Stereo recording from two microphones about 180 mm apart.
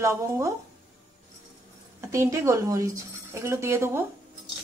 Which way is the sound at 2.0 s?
15° right (ahead or behind).